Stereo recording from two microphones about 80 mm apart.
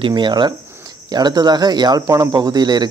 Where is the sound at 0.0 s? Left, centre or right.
Right.